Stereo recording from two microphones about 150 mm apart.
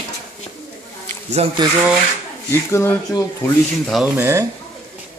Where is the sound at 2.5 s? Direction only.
15° left (ahead or behind).